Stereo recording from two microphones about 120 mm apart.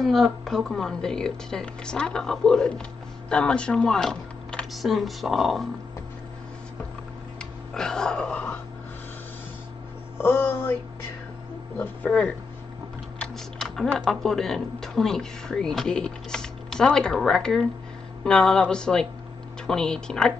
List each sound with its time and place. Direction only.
0.0 s speech: centre (ahead or behind)
7.7 s speech: 5° left (ahead or behind)
10.1 s speech: 20° left (ahead or behind)
11.8 s speech: 10° left (ahead or behind)
13.2 s typing: centre (ahead or behind)
13.9 s speech: centre (ahead or behind)